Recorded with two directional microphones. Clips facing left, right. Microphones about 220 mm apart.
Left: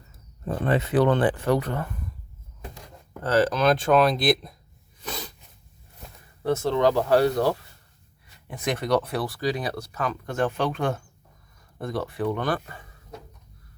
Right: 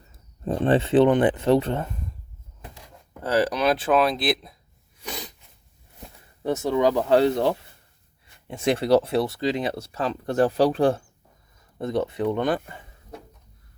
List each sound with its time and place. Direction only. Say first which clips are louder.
0.4 s speech: right 4 dB; 30° right (ahead or behind)
3.2 s speech: left 1 dB; 15° right (ahead or behind)
5.0 s sneeze: even; 15° right (ahead or behind)
6.4 s speech: even; 20° right (ahead or behind); by 11.0 s 35° right (ahead or behind)
11.8 s speech: right 4 dB; 20° right (ahead or behind)